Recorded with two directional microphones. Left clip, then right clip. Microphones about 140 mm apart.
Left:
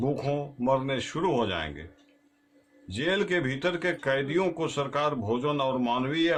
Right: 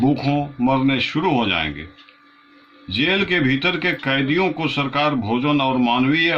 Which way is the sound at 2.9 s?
35° left (ahead or behind).